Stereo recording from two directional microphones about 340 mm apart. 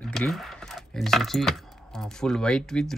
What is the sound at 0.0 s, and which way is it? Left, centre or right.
Speech, centre.